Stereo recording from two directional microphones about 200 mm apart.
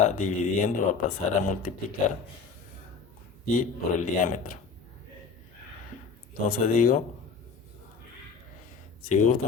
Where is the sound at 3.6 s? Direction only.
40° left (ahead or behind).